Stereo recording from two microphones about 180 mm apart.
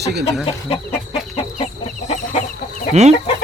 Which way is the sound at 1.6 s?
35° left (ahead or behind).